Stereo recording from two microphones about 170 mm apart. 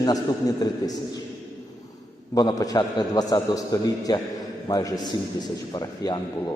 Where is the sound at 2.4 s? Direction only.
20° left (ahead or behind).